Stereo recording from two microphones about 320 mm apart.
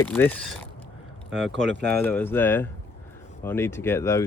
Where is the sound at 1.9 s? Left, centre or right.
Centre.